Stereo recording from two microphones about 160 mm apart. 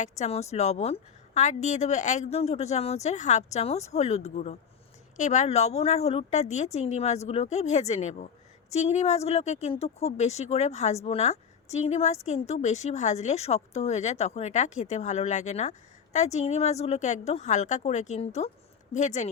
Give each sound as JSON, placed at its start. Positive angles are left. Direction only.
{"t": 0.0, "sound": "a woman's voice", "side_deg": 45}